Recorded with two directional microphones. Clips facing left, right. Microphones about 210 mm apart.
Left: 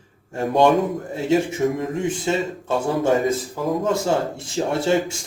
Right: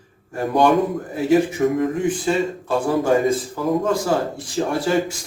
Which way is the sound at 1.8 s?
25° left (ahead or behind).